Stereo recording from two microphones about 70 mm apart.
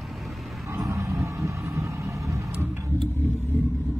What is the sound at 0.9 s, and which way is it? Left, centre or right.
Vehicle, right.